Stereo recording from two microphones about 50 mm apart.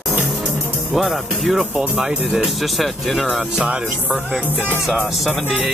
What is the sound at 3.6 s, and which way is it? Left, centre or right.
Speech, right.